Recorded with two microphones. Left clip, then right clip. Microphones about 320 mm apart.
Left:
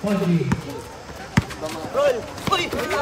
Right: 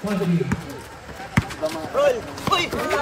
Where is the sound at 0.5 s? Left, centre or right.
Centre.